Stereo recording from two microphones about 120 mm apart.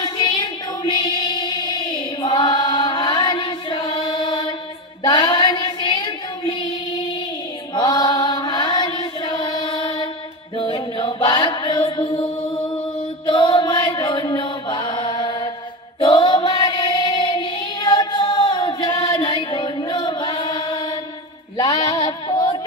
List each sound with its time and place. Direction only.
0.0 s music: 35° left (ahead or behind)
5.0 s child singing: 40° left (ahead or behind)
7.7 s mantra: 35° left (ahead or behind)
10.6 s mantra: 45° left (ahead or behind)
13.3 s chant: 40° left (ahead or behind)
16.0 s child singing: 40° left (ahead or behind)
21.5 s female singing: 35° left (ahead or behind)